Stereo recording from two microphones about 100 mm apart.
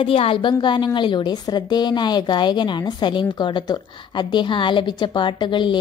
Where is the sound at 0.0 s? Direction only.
70° left (ahead or behind).